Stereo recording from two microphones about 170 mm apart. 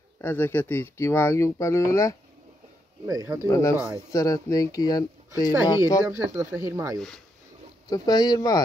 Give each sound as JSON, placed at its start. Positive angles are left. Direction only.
{"t": 0.2, "sound": "speech", "side_deg": 15}
{"t": 3.1, "sound": "speech", "side_deg": -20}
{"t": 3.4, "sound": "speech", "side_deg": 20}
{"t": 6.0, "sound": "speech", "side_deg": -15}
{"t": 7.9, "sound": "speech", "side_deg": 25}